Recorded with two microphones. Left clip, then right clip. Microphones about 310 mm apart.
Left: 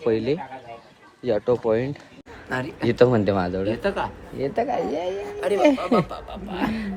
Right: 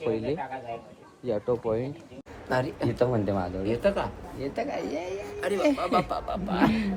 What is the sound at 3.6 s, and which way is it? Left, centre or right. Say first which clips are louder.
Speech: left 2 dB; centre.